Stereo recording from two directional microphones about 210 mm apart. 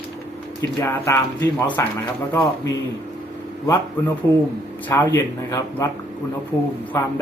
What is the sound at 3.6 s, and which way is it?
Speech, 15° left (ahead or behind).